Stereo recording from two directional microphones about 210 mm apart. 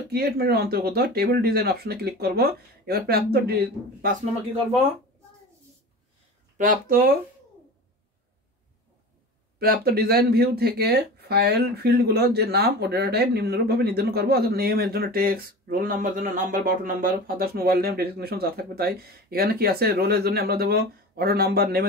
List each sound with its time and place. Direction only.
0.1 s speech: 50° right (ahead or behind)
6.6 s speech: 40° right (ahead or behind)
9.6 s speech: 45° right (ahead or behind)